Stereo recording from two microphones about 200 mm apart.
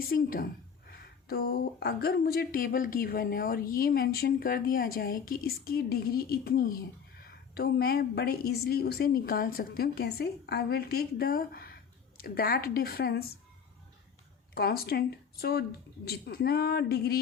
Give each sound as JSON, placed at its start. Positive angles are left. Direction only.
{"t": 0.1, "sound": "a woman's voice", "side_deg": 45}
{"t": 14.5, "sound": "a woman's voice", "side_deg": 50}